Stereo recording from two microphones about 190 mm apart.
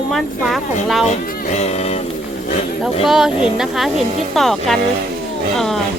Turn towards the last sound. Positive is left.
turn(degrees=0)  # may be behind; listen again after turning